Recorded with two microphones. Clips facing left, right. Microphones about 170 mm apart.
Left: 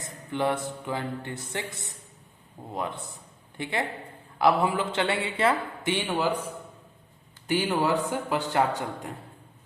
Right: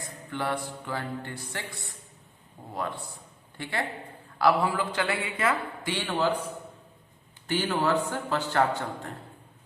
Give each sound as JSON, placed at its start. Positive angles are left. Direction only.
{"t": 0.0, "sound": "a man's voice", "side_deg": 20}
{"t": 7.4, "sound": "a man's voice", "side_deg": 15}